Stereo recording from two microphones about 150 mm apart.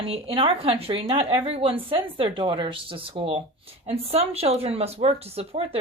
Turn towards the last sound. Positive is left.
turn(degrees=-40)  # may be behind; listen again after turning